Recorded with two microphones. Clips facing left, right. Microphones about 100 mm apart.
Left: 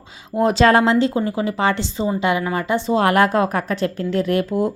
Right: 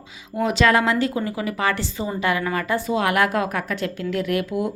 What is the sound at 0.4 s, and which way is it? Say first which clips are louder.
A woman's voice: left 4 dB; 35° left (ahead or behind).